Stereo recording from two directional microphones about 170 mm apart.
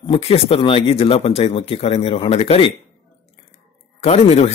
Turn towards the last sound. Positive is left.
turn(degrees=40)  # may be behind; listen again after turning